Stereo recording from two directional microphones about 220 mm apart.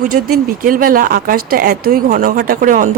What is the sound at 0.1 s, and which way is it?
Speech, 40° right (ahead or behind).